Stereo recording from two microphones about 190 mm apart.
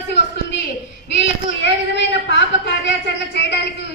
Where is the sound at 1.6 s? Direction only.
70° left (ahead or behind).